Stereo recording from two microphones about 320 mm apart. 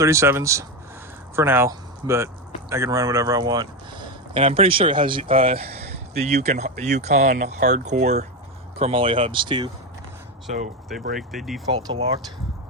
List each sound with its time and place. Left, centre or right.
0.0 s speech: centre
11.2 s speech: centre
11.6 s speech: centre